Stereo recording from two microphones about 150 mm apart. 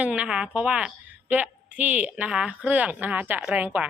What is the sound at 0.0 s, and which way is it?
A woman's voice, 10° right (ahead or behind).